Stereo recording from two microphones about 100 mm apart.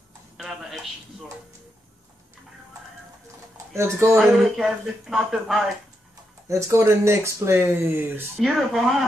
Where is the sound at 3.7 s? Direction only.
30° right (ahead or behind).